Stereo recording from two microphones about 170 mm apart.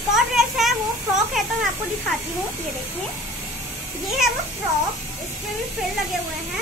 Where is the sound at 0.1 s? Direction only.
Centre (ahead or behind).